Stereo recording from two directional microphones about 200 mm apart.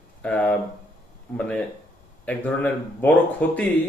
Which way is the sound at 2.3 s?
5° left (ahead or behind).